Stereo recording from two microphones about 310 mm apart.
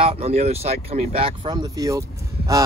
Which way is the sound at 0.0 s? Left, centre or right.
Centre.